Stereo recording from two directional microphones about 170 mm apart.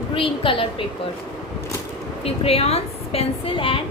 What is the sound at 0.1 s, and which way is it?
Speech, 30° left (ahead or behind).